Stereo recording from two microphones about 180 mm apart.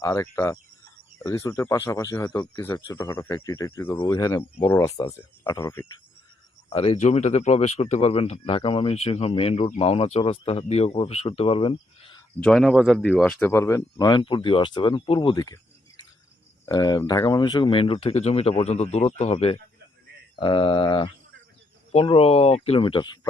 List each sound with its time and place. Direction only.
0.0 s speech: 15° left (ahead or behind)
6.7 s speech: 30° left (ahead or behind)
12.4 s speech: centre (ahead or behind)
13.5 s speech: 15° left (ahead or behind)
16.6 s speech: 20° left (ahead or behind)